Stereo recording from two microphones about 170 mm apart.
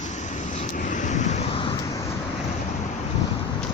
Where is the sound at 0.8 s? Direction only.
50° left (ahead or behind).